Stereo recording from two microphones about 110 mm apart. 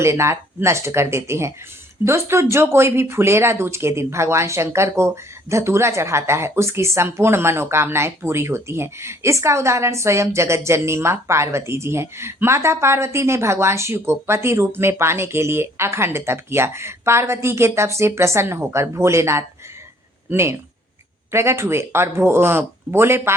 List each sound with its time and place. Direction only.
0.0 s speech: 25° right (ahead or behind)